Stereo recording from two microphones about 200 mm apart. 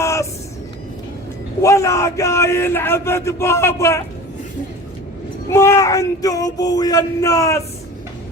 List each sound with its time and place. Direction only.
0.0 s a sound: 15° left (ahead or behind)
1.6 s a man's voice: 15° left (ahead or behind)
5.5 s a man's voice: 15° left (ahead or behind)